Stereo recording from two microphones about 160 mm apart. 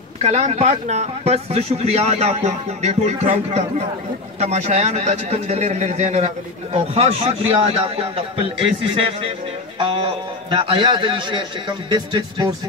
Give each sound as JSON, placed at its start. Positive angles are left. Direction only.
{"t": 0.2, "sound": "a man's voice", "side_deg": -40}